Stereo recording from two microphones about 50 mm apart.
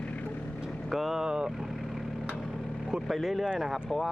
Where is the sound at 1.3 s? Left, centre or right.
Centre.